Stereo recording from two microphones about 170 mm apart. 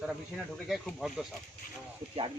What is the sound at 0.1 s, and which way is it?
A man's voice, centre (ahead or behind).